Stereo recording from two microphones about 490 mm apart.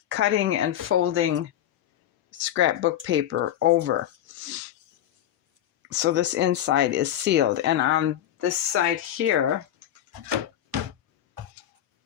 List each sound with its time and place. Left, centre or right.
0.1 s speech: right
2.3 s speech: right
5.9 s speech: right